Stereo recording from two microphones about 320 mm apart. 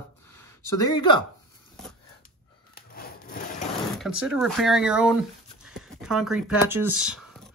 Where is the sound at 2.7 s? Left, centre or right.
Left.